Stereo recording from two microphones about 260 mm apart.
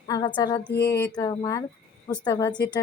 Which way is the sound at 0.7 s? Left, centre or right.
Left.